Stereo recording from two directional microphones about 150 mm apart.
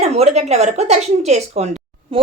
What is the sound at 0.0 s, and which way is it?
A woman's voice, 45° right (ahead or behind).